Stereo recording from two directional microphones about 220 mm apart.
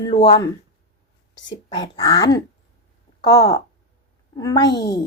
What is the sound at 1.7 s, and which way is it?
A woman's voice, 20° left (ahead or behind).